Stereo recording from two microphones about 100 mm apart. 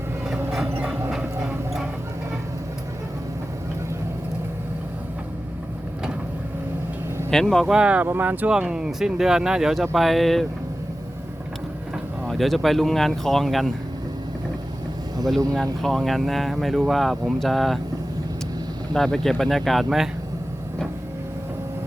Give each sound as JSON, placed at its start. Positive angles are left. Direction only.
{"t": 1.4, "sound": "a sound", "side_deg": -5}
{"t": 7.3, "sound": "speech", "side_deg": 5}
{"t": 7.7, "sound": "speech", "side_deg": -10}
{"t": 12.2, "sound": "speech", "side_deg": 0}
{"t": 15.5, "sound": "speech", "side_deg": 5}
{"t": 18.9, "sound": "speech", "side_deg": 5}